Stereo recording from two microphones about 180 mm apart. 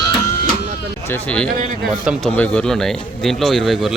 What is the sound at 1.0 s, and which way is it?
Speech, 10° left (ahead or behind).